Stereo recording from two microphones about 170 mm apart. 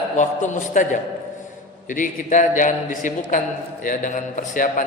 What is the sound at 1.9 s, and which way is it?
A man's voice, 50° left (ahead or behind).